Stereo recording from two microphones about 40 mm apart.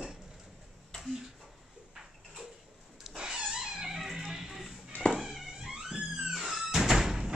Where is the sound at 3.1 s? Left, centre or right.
Right.